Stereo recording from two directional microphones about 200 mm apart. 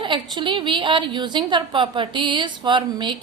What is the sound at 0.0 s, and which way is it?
A woman's voice, 25° right (ahead or behind).